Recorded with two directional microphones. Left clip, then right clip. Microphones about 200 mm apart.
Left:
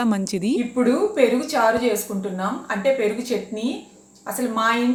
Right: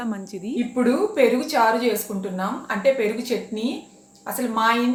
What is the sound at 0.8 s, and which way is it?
A woman's voice, 15° right (ahead or behind).